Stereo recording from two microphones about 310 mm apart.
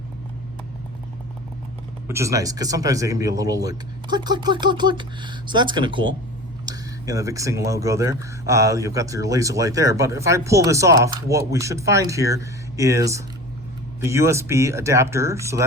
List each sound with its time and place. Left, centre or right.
2.0 s speech: centre